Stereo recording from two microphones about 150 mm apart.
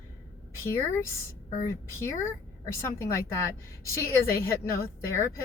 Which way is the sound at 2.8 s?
20° left (ahead or behind).